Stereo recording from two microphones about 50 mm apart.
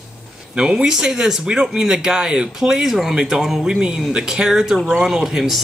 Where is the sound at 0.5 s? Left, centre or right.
Centre.